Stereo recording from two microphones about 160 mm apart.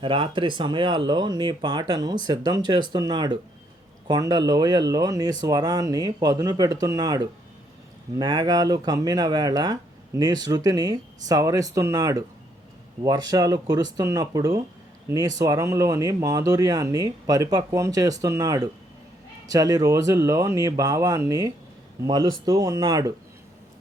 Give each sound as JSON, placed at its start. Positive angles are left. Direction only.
{"t": 0.0, "sound": "speech", "side_deg": -30}